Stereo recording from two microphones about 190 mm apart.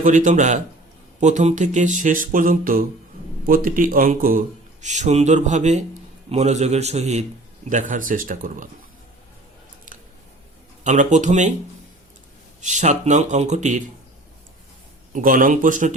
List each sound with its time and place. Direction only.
0.0 s a man's voice: 40° right (ahead or behind)
10.8 s a man's voice: 40° right (ahead or behind)
12.6 s a man's voice: 40° right (ahead or behind)
15.1 s speech: 45° right (ahead or behind)